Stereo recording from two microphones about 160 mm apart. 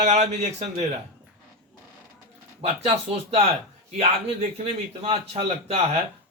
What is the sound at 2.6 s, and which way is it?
A man's voice, 40° right (ahead or behind).